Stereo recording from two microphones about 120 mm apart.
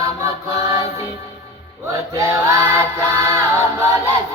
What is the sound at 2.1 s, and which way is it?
Music, 25° right (ahead or behind).